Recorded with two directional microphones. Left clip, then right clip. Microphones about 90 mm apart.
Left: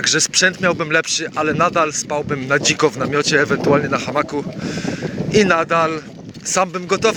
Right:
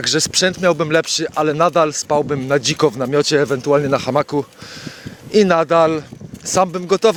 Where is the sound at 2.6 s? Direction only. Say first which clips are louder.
Left 2 dB; 20° right (ahead or behind).